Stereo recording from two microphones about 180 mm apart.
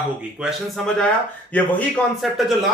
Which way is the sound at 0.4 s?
5° right (ahead or behind).